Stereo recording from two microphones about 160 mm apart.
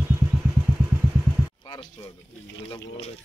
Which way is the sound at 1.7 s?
30° left (ahead or behind).